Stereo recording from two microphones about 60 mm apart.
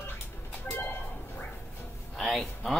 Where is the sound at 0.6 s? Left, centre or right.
Left.